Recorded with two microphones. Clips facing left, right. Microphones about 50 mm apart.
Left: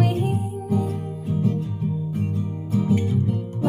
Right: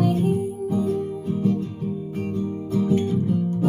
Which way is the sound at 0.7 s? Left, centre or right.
Left.